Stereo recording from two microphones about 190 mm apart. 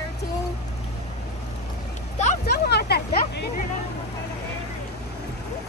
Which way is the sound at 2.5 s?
60° left (ahead or behind).